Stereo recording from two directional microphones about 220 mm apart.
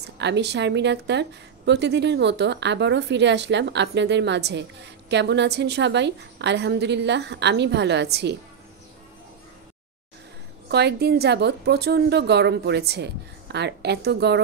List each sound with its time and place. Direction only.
0.2 s a woman's voice: 50° right (ahead or behind)
10.7 s a woman's voice: 50° right (ahead or behind)